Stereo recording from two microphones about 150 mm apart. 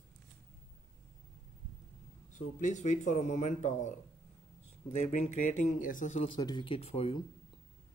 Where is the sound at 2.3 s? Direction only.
55° left (ahead or behind).